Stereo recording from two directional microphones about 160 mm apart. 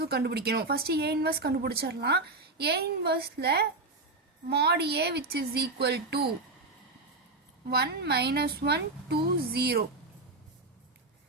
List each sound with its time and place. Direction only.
0.0 s a woman's voice: 85° right
7.7 s a woman's voice: 90° right